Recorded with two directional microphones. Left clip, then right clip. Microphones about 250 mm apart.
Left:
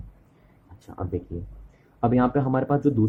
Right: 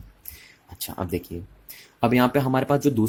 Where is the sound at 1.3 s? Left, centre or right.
Right.